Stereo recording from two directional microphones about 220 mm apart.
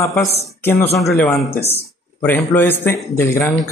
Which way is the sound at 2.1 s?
10° left (ahead or behind).